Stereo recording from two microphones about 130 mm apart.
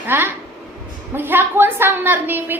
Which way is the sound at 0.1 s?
15° right (ahead or behind).